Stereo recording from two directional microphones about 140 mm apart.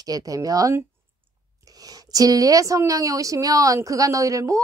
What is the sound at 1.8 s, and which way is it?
A woman's voice, 25° right (ahead or behind).